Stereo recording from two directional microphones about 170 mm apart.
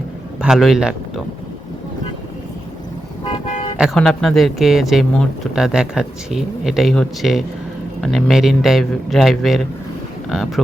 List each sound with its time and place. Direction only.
0.4 s speech: centre (ahead or behind)
3.8 s speech: centre (ahead or behind)